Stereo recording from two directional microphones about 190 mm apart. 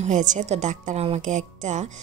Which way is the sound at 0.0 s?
40° right (ahead or behind).